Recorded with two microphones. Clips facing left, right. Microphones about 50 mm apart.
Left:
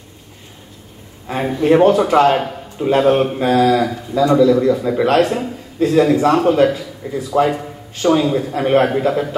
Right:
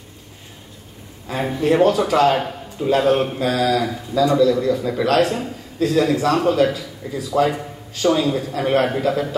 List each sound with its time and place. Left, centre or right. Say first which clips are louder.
1.6 s a man's voice: left 4 dB; left